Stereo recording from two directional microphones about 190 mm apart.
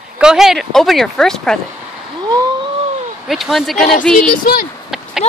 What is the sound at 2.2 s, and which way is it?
Cat, 20° right (ahead or behind).